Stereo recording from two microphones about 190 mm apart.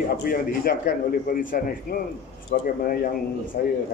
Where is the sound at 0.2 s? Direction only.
50° left (ahead or behind).